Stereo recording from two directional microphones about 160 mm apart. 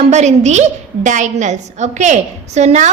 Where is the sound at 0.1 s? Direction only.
45° right (ahead or behind).